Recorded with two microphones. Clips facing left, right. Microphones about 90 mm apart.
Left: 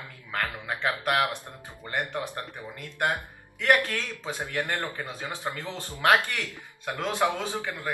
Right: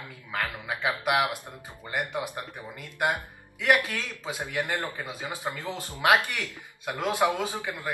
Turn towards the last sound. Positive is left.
turn(degrees=-15)  # may be behind; listen again after turning